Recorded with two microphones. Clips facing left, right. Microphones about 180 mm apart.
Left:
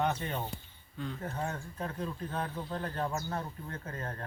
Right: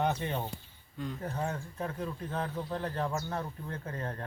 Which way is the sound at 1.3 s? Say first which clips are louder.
Right 2 dB; 10° right (ahead or behind).